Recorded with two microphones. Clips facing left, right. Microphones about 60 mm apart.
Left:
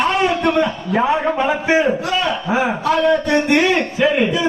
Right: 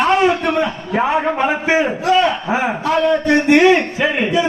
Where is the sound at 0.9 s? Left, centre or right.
Right.